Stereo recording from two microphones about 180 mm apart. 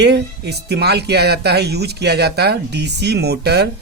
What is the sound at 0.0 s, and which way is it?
Speech, 65° right (ahead or behind).